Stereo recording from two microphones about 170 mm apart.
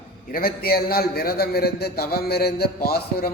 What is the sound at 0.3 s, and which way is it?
A man's voice, 60° left (ahead or behind).